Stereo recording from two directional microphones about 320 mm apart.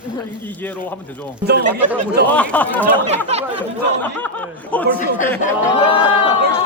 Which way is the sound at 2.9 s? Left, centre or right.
Centre.